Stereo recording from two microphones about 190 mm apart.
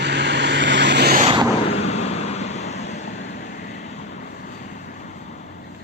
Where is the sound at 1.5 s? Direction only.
30° left (ahead or behind).